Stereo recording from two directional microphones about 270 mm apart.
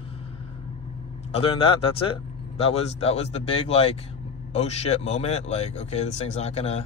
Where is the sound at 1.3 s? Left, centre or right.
Centre.